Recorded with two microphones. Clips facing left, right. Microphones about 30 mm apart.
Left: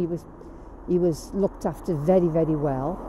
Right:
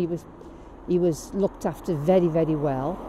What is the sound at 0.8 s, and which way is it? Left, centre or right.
Speech, right.